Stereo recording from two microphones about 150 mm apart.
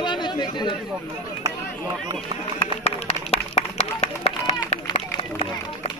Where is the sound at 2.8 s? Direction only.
45° left (ahead or behind).